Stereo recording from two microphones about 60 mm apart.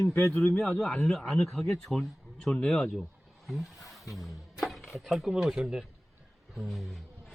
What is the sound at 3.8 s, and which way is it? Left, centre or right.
Music, left.